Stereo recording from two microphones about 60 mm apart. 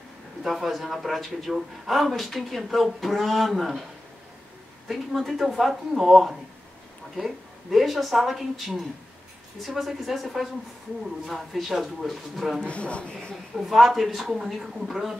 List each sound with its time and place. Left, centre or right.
0.4 s a man's voice: centre
4.8 s a man's voice: centre
12.6 s speech: centre
13.6 s a man's voice: centre